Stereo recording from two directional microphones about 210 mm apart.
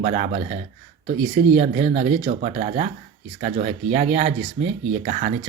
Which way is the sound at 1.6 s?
30° right (ahead or behind).